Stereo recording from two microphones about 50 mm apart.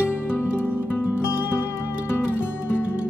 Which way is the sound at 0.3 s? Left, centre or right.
Left.